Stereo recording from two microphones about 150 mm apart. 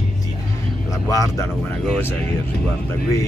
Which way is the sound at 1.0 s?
20° left (ahead or behind).